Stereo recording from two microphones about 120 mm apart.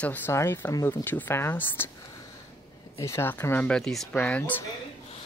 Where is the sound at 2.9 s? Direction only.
25° left (ahead or behind).